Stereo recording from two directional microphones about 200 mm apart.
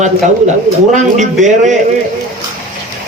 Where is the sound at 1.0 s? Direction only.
35° right (ahead or behind).